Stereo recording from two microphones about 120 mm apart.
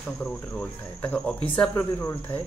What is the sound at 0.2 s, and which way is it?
Speech, 10° left (ahead or behind).